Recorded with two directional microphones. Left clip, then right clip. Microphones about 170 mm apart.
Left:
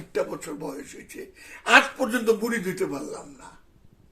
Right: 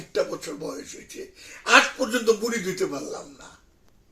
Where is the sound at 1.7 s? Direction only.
15° left (ahead or behind).